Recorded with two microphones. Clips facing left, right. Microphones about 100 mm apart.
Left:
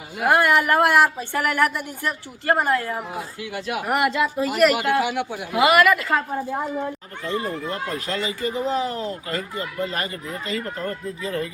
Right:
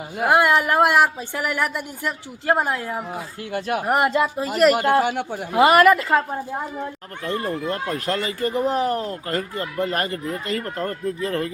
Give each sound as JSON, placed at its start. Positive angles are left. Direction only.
{"t": 0.3, "sound": "a woman's voice", "side_deg": -15}
{"t": 3.5, "sound": "speech", "side_deg": -40}
{"t": 7.9, "sound": "speech", "side_deg": -50}